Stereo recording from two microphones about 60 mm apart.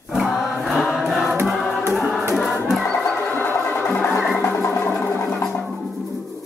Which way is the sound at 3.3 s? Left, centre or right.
Left.